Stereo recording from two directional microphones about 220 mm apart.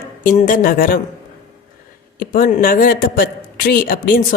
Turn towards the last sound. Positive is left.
turn(degrees=40)  # may be behind; listen again after turning